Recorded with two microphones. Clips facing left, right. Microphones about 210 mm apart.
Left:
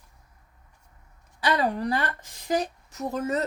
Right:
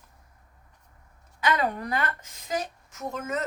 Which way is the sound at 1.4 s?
30° left (ahead or behind).